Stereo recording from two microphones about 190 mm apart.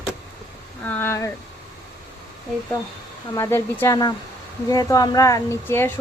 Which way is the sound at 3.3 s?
15° left (ahead or behind).